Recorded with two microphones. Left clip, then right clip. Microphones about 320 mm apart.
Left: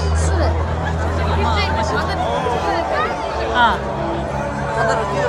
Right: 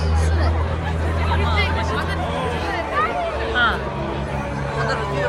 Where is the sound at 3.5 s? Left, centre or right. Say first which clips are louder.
Left 4 dB; centre.